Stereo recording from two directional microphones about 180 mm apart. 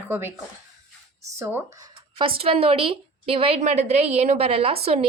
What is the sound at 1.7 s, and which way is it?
A woman's voice, 25° right (ahead or behind).